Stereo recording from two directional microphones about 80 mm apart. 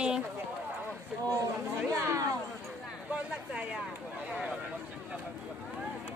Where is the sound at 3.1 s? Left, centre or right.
Centre.